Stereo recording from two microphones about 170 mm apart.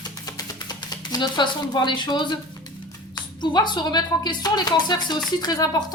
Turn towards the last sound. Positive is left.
turn(degrees=25)  # may be behind; listen again after turning